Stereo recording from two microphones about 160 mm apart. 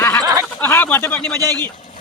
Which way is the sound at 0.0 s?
10° left (ahead or behind).